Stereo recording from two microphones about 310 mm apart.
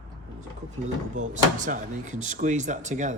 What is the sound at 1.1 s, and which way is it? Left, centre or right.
Speech, right.